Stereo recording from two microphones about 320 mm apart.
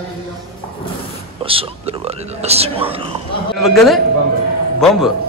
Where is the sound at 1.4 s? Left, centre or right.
Centre.